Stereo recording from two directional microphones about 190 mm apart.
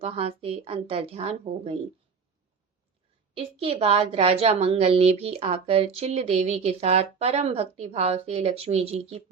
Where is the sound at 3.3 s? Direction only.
30° right (ahead or behind).